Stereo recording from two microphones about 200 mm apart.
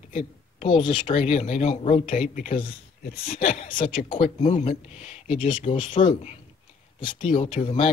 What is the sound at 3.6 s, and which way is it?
Speech, 25° left (ahead or behind).